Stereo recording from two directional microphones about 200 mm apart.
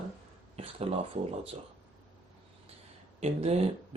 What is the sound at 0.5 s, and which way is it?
Speech, 30° right (ahead or behind).